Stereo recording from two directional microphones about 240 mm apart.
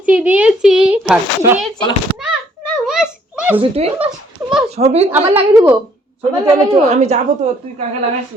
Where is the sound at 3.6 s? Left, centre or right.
Right.